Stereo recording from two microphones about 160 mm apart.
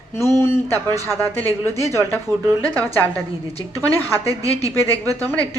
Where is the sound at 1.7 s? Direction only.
20° right (ahead or behind).